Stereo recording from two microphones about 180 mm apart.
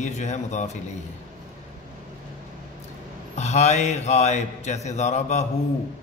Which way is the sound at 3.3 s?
40° left (ahead or behind).